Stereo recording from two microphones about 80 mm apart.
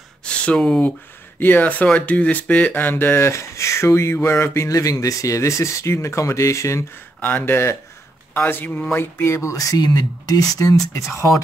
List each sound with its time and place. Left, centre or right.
0.2 s a sound: centre
1.4 s speech: left
4.6 s speech: left
7.2 s speech: left